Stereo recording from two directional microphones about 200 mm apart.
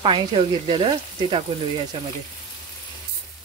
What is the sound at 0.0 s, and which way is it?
Speech, 25° right (ahead or behind).